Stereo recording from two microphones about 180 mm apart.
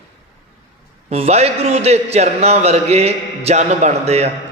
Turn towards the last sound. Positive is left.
turn(degrees=-35)  # may be behind; listen again after turning